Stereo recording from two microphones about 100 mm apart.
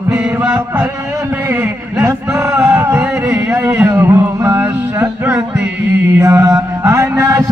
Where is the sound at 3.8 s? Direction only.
25° right (ahead or behind).